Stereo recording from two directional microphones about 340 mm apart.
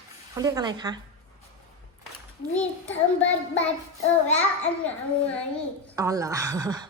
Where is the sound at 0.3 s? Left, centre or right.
Centre.